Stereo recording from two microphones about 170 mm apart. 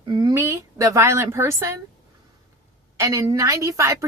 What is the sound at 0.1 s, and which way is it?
Speech, 20° right (ahead or behind).